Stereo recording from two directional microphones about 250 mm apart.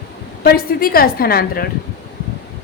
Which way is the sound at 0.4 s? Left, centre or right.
Left.